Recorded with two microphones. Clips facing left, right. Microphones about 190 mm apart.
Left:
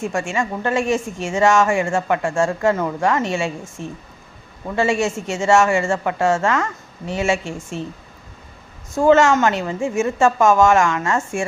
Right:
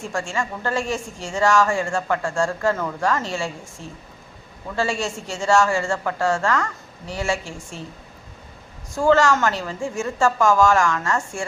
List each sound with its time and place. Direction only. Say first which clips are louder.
0.0 s a woman's voice: left 4 dB; 20° left (ahead or behind)
9.0 s a woman's voice: left 4 dB; 20° left (ahead or behind)